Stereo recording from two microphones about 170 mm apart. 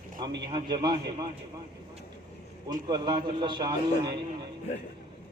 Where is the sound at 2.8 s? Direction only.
25° right (ahead or behind).